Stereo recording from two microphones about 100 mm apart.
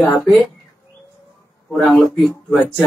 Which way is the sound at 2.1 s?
15° left (ahead or behind).